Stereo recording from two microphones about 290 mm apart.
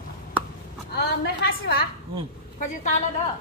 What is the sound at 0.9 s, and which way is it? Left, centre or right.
Speech, left.